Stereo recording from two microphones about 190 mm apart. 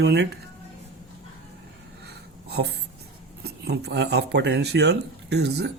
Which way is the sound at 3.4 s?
60° right (ahead or behind).